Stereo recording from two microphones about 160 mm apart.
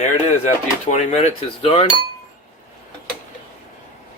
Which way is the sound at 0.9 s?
45° left (ahead or behind).